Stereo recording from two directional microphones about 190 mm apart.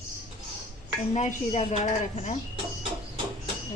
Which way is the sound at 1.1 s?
40° left (ahead or behind).